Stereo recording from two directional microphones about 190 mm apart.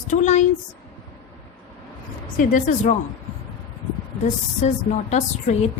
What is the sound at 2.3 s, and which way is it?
Speech, 45° left (ahead or behind).